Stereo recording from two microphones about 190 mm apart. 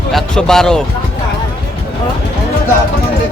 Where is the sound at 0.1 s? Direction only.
Centre (ahead or behind).